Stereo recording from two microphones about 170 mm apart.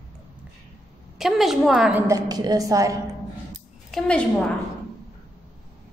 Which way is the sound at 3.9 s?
5° left (ahead or behind).